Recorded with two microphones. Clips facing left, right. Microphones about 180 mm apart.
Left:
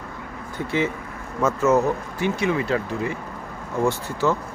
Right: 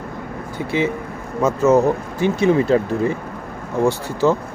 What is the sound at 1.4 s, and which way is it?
Speech, 15° right (ahead or behind).